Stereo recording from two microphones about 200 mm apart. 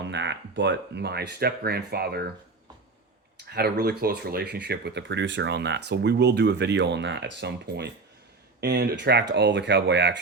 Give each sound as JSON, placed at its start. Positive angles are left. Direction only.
{"t": 0.0, "sound": "speech", "side_deg": -60}
{"t": 3.5, "sound": "speech", "side_deg": -50}